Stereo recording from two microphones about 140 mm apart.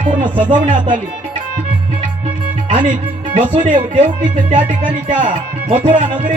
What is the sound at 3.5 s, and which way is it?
Speech, 40° right (ahead or behind).